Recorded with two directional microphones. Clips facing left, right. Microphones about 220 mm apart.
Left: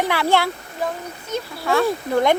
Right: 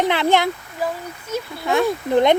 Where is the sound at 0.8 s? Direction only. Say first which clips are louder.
Even; 5° right (ahead or behind).